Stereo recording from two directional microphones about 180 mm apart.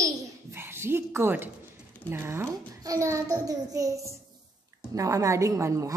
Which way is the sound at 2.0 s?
15° right (ahead or behind).